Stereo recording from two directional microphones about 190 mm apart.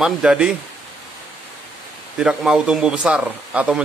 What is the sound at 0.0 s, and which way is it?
Speech, 5° right (ahead or behind).